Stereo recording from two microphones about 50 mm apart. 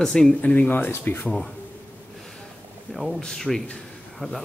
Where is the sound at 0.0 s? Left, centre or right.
Centre.